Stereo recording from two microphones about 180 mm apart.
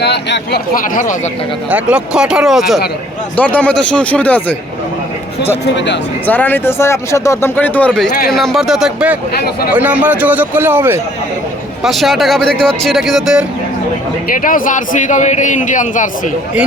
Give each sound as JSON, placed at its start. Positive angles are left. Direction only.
{"t": 0.0, "sound": "speech", "side_deg": 70}
{"t": 1.7, "sound": "speech", "side_deg": -5}
{"t": 5.7, "sound": "speech", "side_deg": 80}
{"t": 6.2, "sound": "a man's voice", "side_deg": 10}
{"t": 11.8, "sound": "speech", "side_deg": 0}
{"t": 14.3, "sound": "a man's voice", "side_deg": 50}